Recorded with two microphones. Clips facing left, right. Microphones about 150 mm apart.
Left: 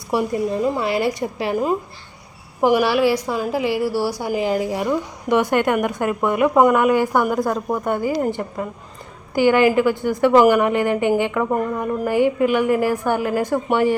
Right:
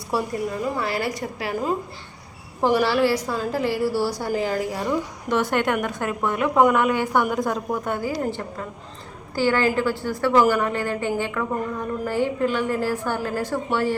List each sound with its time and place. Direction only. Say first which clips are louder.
0.1 s a woman's voice: left 5 dB; 20° left (ahead or behind)